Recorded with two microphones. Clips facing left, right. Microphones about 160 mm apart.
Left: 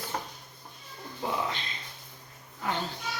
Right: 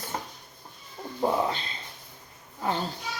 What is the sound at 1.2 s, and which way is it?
Speech, 40° right (ahead or behind).